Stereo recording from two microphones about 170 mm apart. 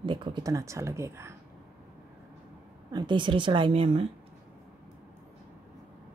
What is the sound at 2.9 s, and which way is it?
Speech, 25° right (ahead or behind).